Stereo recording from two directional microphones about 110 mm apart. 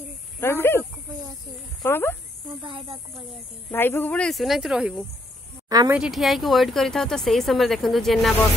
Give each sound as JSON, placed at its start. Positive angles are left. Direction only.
{"t": 0.4, "sound": "speech", "side_deg": 20}
{"t": 1.9, "sound": "speech", "side_deg": 20}
{"t": 2.6, "sound": "speech", "side_deg": -50}
{"t": 3.7, "sound": "speech", "side_deg": 20}
{"t": 4.3, "sound": "speech", "side_deg": 0}
{"t": 5.9, "sound": "speech", "side_deg": -5}